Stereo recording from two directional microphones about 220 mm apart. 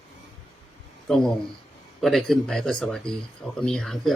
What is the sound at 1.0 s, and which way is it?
Speech, centre (ahead or behind).